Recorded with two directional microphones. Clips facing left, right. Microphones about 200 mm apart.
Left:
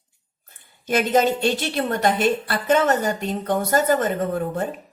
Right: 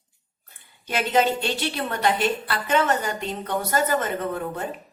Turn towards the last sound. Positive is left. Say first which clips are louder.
# left 4 dB
turn(degrees=45)  # may be behind; listen again after turning